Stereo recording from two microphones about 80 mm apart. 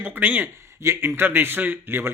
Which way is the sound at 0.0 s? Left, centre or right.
Right.